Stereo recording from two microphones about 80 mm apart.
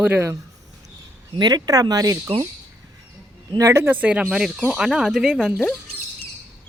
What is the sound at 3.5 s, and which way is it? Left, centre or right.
Speech, right.